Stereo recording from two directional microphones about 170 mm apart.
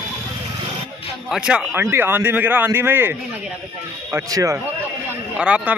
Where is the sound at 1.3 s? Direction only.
5° right (ahead or behind).